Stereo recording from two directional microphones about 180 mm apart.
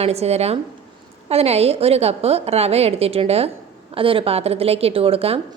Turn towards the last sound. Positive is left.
turn(degrees=-30)  # may be behind; listen again after turning